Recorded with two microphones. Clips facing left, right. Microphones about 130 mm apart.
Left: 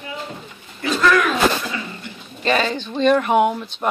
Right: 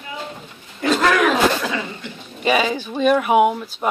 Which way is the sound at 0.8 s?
60° right (ahead or behind).